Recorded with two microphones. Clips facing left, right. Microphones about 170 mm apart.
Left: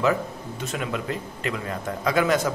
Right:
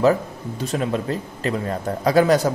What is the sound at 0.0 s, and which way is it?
A man's voice, 35° right (ahead or behind).